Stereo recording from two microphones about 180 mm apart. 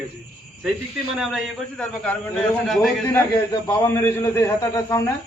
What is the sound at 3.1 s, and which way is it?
A man's voice, 20° left (ahead or behind).